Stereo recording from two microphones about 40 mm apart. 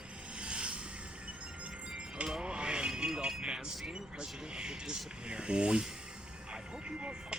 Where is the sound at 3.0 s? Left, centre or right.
Centre.